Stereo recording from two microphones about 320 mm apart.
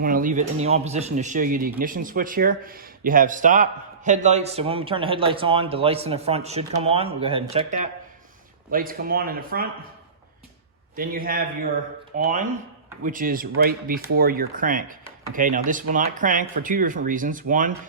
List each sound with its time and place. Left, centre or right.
0.0 s speech: right
10.9 s speech: right